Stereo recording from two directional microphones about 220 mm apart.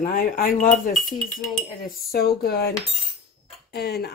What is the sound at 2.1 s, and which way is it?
Speech, 45° left (ahead or behind).